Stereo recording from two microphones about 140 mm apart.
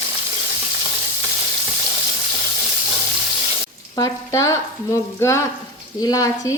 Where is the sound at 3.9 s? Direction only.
25° left (ahead or behind).